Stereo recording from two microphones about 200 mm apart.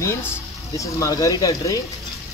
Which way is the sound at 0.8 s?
15° left (ahead or behind).